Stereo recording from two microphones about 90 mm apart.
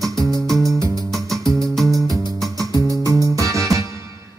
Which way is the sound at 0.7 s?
40° right (ahead or behind).